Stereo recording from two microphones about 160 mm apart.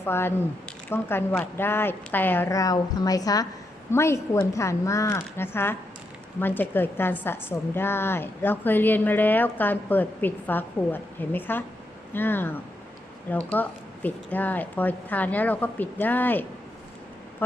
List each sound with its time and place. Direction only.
0.0 s a woman's voice: 15° left (ahead or behind)